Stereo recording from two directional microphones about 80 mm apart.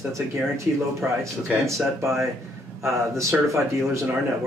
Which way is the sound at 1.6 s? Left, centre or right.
Right.